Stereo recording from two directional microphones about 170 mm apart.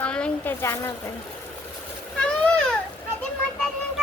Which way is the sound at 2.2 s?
5° left (ahead or behind).